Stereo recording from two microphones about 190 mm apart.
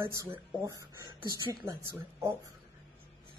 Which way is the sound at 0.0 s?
15° right (ahead or behind).